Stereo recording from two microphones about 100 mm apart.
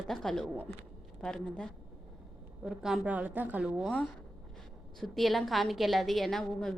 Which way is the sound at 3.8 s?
5° left (ahead or behind).